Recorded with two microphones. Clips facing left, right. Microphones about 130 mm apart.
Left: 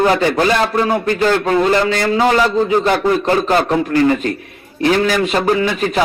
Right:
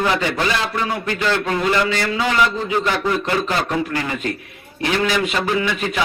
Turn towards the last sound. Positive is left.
turn(degrees=40)  # may be behind; listen again after turning